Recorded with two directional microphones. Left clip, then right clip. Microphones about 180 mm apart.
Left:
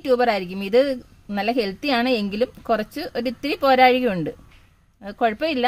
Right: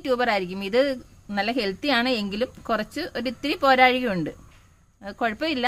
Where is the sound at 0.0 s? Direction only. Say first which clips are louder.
Left 4 dB; 45° left (ahead or behind).